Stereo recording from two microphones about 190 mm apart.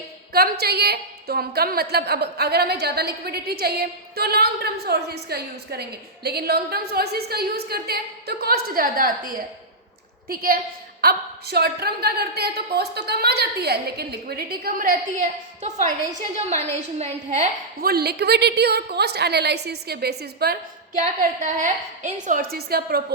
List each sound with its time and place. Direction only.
0.3 s a woman's voice: 55° right (ahead or behind)
16.3 s a woman's voice: 35° right (ahead or behind)
17.7 s a woman's voice: 55° right (ahead or behind)